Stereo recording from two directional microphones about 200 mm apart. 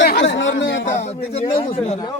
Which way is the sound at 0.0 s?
50° left (ahead or behind).